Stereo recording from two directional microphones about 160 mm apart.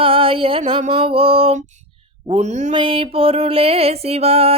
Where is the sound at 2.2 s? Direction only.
45° right (ahead or behind).